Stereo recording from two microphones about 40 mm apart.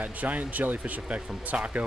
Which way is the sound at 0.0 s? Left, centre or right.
Right.